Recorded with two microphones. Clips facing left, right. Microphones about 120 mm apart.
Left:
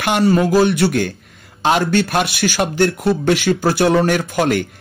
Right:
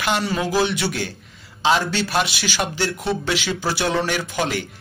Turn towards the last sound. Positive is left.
turn(degrees=55)  # may be behind; listen again after turning